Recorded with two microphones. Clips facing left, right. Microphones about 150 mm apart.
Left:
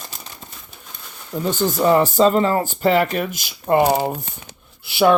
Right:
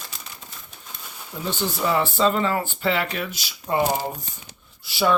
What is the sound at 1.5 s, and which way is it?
Speech, 45° left (ahead or behind).